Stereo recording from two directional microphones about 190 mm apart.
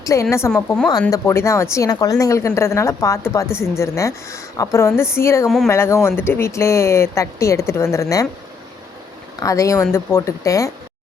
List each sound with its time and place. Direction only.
0.0 s speech: 15° left (ahead or behind)
9.4 s speech: 15° left (ahead or behind)